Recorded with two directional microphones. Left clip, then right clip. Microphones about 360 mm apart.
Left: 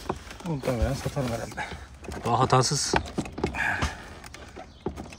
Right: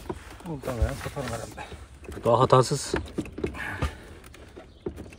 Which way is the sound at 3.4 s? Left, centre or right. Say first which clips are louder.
Left 8 dB; left.